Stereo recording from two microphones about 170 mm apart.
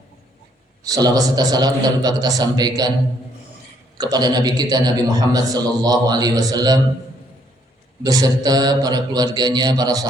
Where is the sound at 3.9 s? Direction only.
25° right (ahead or behind).